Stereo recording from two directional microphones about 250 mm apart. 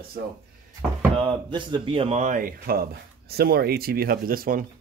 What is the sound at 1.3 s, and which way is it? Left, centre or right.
Speech, centre.